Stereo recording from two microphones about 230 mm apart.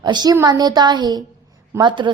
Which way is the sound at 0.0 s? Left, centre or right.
Centre.